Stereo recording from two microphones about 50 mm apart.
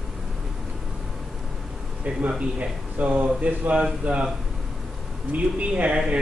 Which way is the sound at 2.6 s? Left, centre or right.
Right.